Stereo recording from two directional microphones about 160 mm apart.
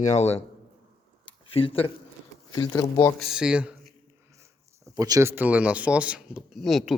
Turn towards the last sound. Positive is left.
turn(degrees=0)  # may be behind; listen again after turning